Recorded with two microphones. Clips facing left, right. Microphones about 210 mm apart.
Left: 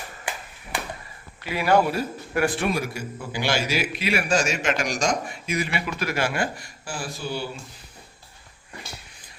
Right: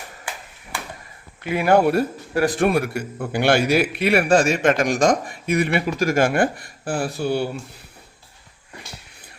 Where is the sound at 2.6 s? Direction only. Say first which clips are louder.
Right 6 dB; 60° right (ahead or behind).